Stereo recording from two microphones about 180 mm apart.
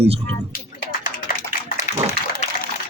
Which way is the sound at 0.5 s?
50° left (ahead or behind).